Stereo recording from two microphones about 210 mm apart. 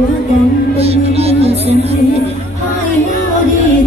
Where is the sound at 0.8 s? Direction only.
30° right (ahead or behind).